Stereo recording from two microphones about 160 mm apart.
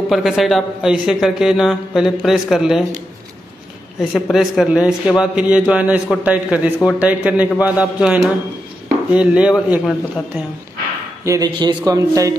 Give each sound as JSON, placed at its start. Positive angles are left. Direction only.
{"t": 0.1, "sound": "a man's voice", "side_deg": 0}
{"t": 4.1, "sound": "a man's voice", "side_deg": 0}
{"t": 11.2, "sound": "speech", "side_deg": -25}